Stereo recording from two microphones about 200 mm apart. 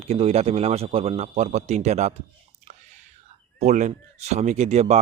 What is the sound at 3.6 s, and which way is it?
Speech, 35° right (ahead or behind).